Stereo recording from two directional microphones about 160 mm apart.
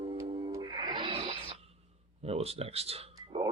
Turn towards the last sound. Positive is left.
turn(degrees=-40)  # may be behind; listen again after turning